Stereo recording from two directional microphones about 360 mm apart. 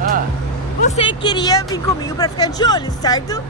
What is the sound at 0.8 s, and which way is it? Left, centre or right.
Speech, centre.